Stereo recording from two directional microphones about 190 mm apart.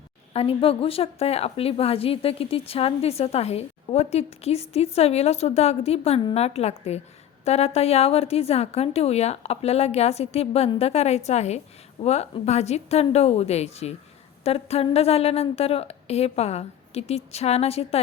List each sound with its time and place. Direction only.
0.3 s a woman's voice: 30° left (ahead or behind)